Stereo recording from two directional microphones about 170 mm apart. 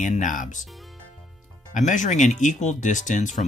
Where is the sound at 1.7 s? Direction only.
45° left (ahead or behind).